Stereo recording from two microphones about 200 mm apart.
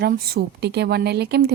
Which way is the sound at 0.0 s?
55° right (ahead or behind).